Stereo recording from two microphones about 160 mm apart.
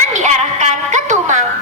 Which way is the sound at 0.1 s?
50° right (ahead or behind).